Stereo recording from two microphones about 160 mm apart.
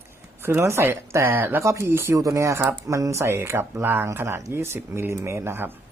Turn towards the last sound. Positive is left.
turn(degrees=-15)  # may be behind; listen again after turning